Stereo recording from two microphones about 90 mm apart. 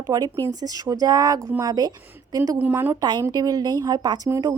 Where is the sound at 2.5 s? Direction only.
20° right (ahead or behind).